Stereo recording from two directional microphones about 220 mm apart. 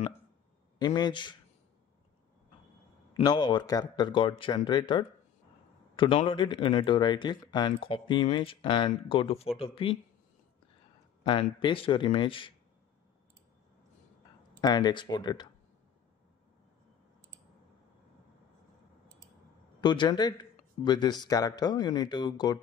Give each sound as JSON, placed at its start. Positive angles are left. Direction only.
{"t": 0.7, "sound": "speech", "side_deg": 20}
{"t": 3.1, "sound": "speech", "side_deg": 20}
{"t": 11.2, "sound": "speech", "side_deg": 20}
{"t": 14.6, "sound": "speech", "side_deg": 20}
{"t": 19.8, "sound": "speech", "side_deg": 20}